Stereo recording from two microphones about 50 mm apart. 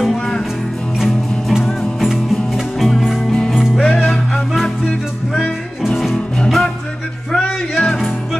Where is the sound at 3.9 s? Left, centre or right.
Left.